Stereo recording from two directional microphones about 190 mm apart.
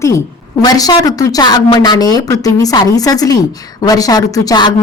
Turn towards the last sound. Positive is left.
turn(degrees=20)  # may be behind; listen again after turning